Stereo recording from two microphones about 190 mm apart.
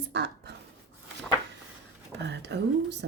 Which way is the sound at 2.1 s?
65° right (ahead or behind).